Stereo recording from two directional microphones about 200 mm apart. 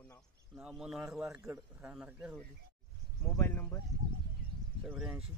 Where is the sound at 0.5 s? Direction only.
5° right (ahead or behind).